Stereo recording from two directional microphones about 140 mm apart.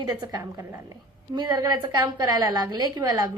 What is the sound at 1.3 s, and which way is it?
A woman's voice, 30° right (ahead or behind).